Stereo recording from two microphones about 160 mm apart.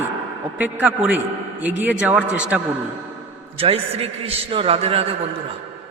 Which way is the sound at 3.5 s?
40° right (ahead or behind).